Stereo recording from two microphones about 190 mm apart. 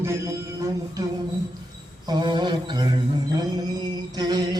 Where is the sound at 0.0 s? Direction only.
15° right (ahead or behind).